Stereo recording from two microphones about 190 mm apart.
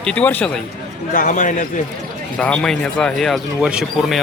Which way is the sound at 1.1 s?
45° left (ahead or behind).